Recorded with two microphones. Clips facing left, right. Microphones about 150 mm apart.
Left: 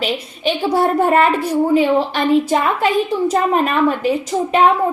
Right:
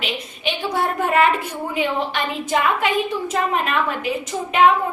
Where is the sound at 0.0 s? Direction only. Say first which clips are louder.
Left 6 dB; 35° left (ahead or behind).